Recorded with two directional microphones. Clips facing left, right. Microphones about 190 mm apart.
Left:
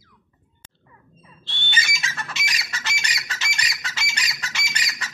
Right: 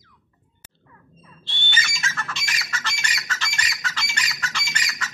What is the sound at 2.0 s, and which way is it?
Squawk, 15° left (ahead or behind).